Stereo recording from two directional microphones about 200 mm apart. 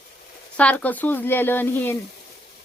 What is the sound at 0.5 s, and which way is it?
A woman's voice, 5° left (ahead or behind).